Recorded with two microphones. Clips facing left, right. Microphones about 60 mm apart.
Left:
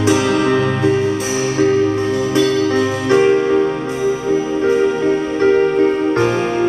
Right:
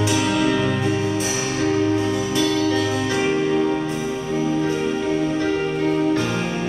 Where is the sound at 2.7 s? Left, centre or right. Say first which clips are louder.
Left 7 dB; left.